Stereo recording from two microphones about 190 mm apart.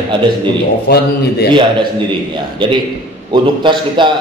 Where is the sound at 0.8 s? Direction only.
55° left (ahead or behind).